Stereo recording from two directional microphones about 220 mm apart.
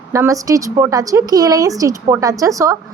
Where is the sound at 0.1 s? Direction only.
15° right (ahead or behind).